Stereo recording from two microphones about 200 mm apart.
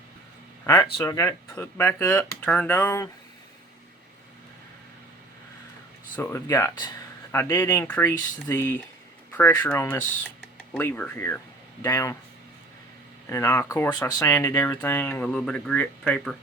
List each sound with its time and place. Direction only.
0.6 s speech: 15° left (ahead or behind)
6.2 s speech: 15° left (ahead or behind)
13.3 s speech: 15° left (ahead or behind)